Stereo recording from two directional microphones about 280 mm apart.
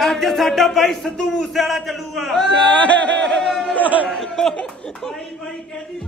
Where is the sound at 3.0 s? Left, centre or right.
Right.